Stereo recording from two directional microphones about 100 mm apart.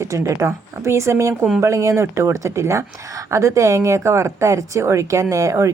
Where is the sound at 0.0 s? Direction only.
30° right (ahead or behind).